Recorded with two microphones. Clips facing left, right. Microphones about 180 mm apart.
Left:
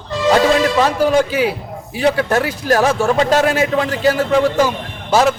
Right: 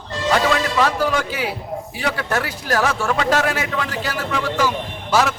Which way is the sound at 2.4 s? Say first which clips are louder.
Left 6 dB; 20° left (ahead or behind).